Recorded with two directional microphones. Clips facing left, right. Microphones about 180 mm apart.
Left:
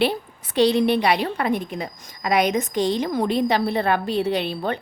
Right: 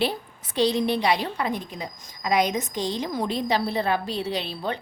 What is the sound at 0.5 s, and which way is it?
A woman's voice, 65° left (ahead or behind).